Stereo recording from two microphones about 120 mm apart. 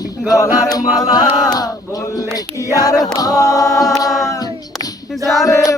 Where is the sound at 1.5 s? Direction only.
30° left (ahead or behind).